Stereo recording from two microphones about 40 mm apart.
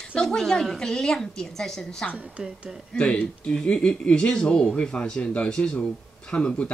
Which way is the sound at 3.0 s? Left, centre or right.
Left.